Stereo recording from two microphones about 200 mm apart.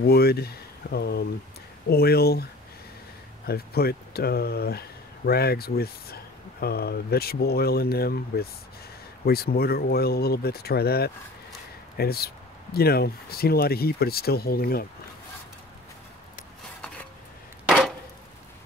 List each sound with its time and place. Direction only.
0.0 s speech: 50° left (ahead or behind)
3.4 s speech: 50° left (ahead or behind)
17.6 s a sound: 5° right (ahead or behind)